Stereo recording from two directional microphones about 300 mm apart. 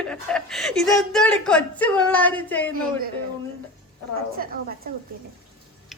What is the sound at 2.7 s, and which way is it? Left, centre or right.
Speech, right.